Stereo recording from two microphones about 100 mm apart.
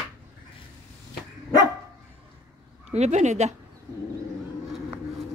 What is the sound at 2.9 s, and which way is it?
Speech, 90° right.